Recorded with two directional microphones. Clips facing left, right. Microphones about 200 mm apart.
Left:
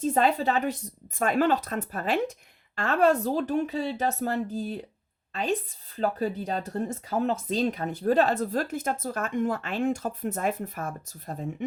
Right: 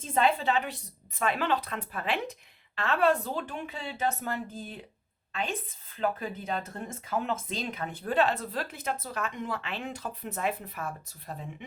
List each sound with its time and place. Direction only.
0.0 s a woman's voice: 40° left (ahead or behind)